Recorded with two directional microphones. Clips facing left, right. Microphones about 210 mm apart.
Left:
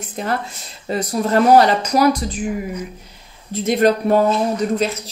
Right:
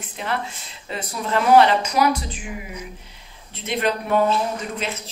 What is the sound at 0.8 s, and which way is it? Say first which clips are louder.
Speech: left 8 dB; 40° left (ahead or behind).